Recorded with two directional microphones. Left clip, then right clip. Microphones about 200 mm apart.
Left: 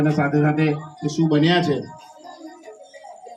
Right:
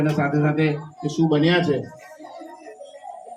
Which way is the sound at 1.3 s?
35° left (ahead or behind).